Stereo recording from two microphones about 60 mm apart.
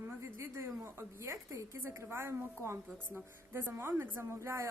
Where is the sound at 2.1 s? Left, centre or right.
Right.